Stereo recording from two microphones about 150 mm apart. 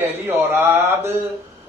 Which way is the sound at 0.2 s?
15° right (ahead or behind).